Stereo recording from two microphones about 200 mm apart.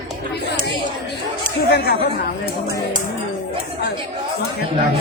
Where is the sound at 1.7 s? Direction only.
55° left (ahead or behind).